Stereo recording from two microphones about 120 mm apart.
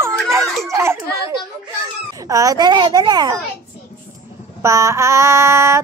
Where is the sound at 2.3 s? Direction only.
30° right (ahead or behind).